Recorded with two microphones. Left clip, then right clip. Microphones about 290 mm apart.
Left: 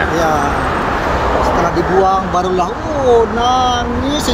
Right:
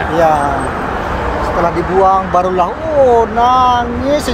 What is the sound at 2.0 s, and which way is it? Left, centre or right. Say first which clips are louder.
Speech: right 3 dB; centre.